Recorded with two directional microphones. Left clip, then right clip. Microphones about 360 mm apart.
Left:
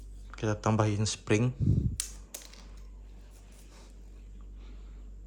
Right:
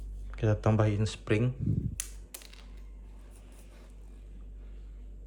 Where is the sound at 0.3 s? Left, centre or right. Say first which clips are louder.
Right 1 dB; centre.